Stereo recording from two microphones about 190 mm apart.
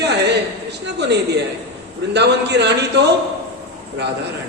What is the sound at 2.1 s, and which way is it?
Speech, 65° right (ahead or behind).